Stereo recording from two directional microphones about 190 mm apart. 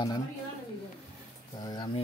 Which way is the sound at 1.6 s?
20° left (ahead or behind).